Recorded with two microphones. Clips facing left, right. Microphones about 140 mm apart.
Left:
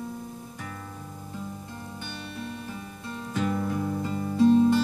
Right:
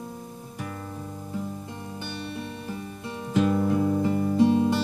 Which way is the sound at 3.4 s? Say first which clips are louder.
Right 6 dB; 20° right (ahead or behind).